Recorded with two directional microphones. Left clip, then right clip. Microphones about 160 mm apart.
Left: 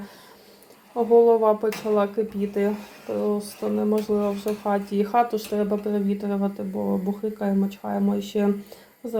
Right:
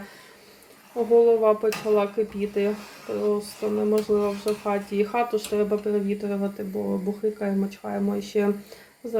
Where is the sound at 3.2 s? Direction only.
10° left (ahead or behind).